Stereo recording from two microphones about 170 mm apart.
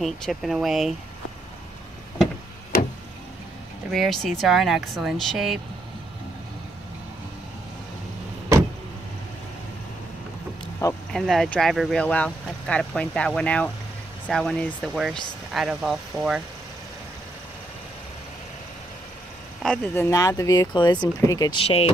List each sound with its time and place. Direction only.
0.0 s speech: centre (ahead or behind)
3.9 s speech: centre (ahead or behind)
10.8 s speech: 20° left (ahead or behind)
11.1 s speech: centre (ahead or behind)
19.6 s speech: 5° left (ahead or behind); by 21.9 s 35° left (ahead or behind)